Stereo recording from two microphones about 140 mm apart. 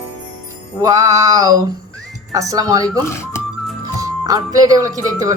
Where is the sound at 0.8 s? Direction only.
25° right (ahead or behind).